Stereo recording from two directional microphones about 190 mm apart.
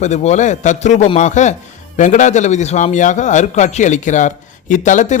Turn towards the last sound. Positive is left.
turn(degrees=40)  # may be behind; listen again after turning